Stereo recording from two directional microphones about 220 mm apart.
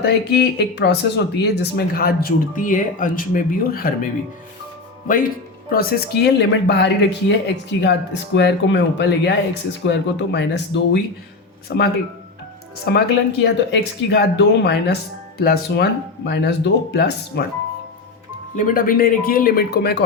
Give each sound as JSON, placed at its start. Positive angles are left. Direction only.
{"t": 0.0, "sound": "speech", "side_deg": 50}
{"t": 5.0, "sound": "speech", "side_deg": 40}
{"t": 18.5, "sound": "speech", "side_deg": 40}